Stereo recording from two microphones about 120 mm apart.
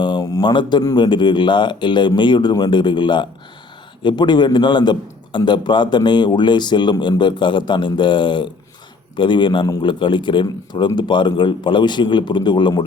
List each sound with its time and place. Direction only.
0.0 s a man's voice: 35° left (ahead or behind)